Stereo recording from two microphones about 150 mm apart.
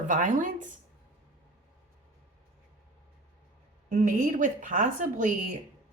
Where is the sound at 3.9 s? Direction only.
55° right (ahead or behind).